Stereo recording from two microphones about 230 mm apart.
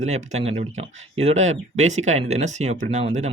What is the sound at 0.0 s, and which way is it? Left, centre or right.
Speech, right.